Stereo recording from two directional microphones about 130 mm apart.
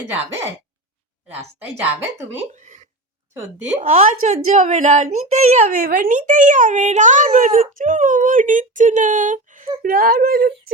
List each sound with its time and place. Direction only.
1.5 s a woman's voice: 15° right (ahead or behind)
2.6 s a sound: 70° right (ahead or behind)
3.8 s a woman's voice: 65° right (ahead or behind); by 10.2 s 90° right